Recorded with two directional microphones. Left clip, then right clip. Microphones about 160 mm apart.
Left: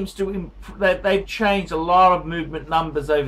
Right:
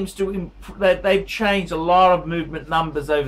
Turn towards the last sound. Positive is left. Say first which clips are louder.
# even
turn(degrees=0)  # may be behind; listen again after turning